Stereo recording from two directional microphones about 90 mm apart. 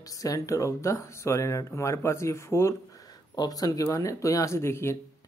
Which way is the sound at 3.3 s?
45° left (ahead or behind).